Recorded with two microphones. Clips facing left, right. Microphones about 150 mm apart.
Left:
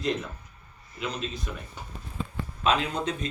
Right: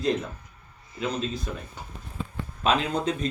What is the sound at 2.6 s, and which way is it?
Speech, 35° right (ahead or behind).